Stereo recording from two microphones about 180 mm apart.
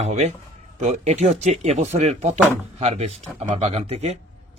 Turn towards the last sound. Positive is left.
turn(degrees=-35)  # may be behind; listen again after turning